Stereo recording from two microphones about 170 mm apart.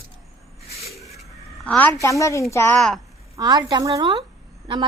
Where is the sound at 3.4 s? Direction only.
25° right (ahead or behind).